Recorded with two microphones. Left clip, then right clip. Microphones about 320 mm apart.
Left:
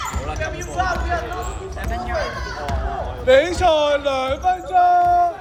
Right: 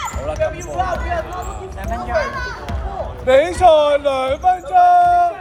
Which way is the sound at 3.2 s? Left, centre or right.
Centre.